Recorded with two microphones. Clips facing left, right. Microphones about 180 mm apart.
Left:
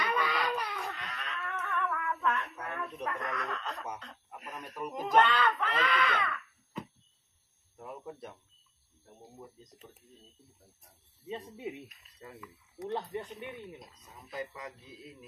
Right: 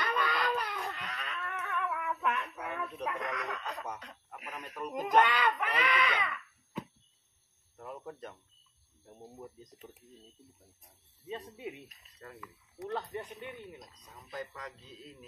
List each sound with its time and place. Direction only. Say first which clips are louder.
0.0 s a sound: left 1 dB; 5° left (ahead or behind); by 3.9 s 10° right (ahead or behind)
4.4 s speech: left 1 dB; 10° right (ahead or behind)
7.7 s a sound: even; 5° left (ahead or behind)
9.6 s speech: right 3 dB; 15° right (ahead or behind)
11.2 s speech: left 2 dB; 20° left (ahead or behind)
12.2 s speech: left 1 dB; 5° left (ahead or behind)
12.8 s speech: left 2 dB; 25° left (ahead or behind)
13.7 s speech: left 1 dB; 10° left (ahead or behind)